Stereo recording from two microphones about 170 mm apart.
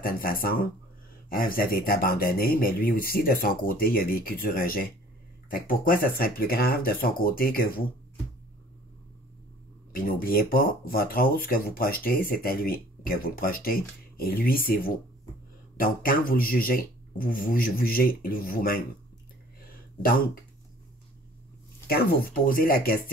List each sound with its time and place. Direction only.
0.0 s speech: 60° left (ahead or behind)
9.9 s speech: 60° left (ahead or behind)
20.0 s speech: 60° left (ahead or behind)
21.8 s speech: 60° left (ahead or behind)